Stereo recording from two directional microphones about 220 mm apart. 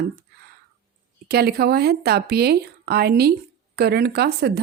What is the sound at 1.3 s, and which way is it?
Speech, 45° right (ahead or behind).